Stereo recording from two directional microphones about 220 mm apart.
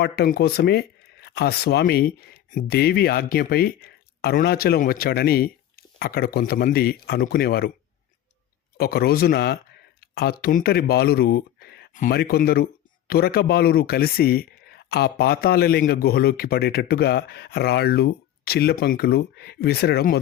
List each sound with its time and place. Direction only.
0.0 s speech: 45° left (ahead or behind)
8.8 s speech: 45° left (ahead or behind)